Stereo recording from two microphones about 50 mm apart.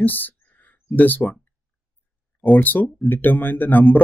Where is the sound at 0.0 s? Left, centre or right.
Left.